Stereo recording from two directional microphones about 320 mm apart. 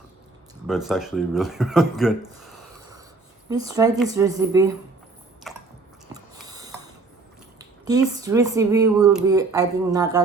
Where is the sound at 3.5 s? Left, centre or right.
Centre.